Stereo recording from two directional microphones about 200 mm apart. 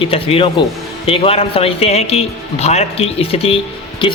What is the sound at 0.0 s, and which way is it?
A man's voice, 30° left (ahead or behind).